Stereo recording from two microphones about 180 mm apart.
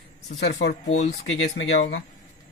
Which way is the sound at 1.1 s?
90° left.